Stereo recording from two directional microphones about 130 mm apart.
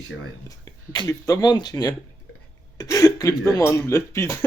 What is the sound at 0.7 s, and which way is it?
Speech, 30° left (ahead or behind).